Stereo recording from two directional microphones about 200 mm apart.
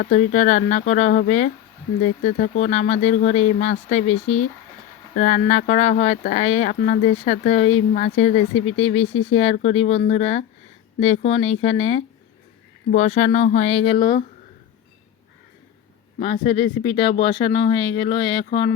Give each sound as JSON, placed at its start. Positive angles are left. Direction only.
{"t": 0.1, "sound": "speech", "side_deg": 35}
{"t": 16.1, "sound": "speech", "side_deg": 30}